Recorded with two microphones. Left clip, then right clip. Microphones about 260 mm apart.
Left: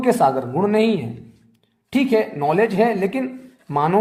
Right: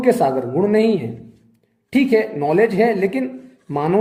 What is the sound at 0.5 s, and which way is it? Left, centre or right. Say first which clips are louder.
Speech: right 2 dB; centre.